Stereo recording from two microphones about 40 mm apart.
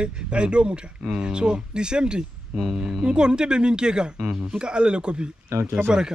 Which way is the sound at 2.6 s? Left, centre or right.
Centre.